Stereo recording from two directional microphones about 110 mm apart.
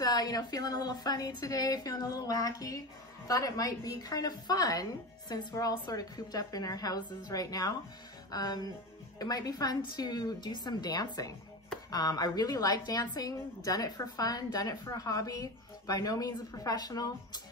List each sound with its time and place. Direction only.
0.0 s a woman's voice: 35° left (ahead or behind)